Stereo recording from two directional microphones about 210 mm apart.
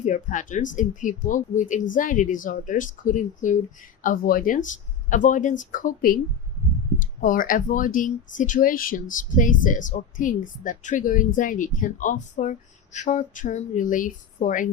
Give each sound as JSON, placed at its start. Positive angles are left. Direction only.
{"t": 0.0, "sound": "speech", "side_deg": 35}